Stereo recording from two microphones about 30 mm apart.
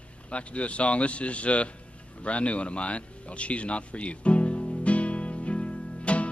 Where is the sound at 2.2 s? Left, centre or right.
Left.